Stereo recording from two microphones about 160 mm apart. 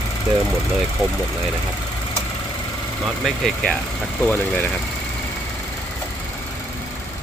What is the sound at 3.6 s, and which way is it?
Speech, 10° left (ahead or behind).